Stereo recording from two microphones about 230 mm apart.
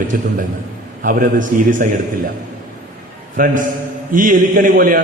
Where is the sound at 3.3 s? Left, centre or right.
Right.